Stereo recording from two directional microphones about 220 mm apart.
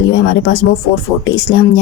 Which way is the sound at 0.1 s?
50° left (ahead or behind).